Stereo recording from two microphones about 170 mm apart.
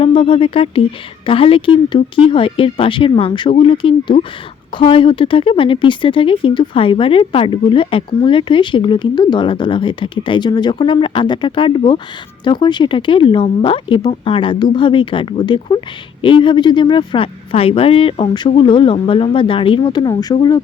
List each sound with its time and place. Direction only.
0.0 s a woman's voice: 30° left (ahead or behind)